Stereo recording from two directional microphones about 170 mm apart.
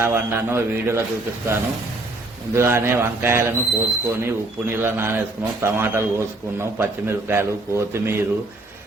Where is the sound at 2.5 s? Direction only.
15° right (ahead or behind).